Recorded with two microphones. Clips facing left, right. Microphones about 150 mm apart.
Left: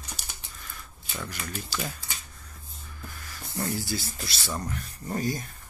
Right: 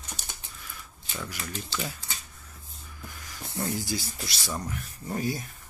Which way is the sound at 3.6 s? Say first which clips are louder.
Even; 15° right (ahead or behind).